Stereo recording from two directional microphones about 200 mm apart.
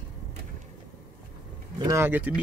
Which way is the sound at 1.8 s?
15° right (ahead or behind).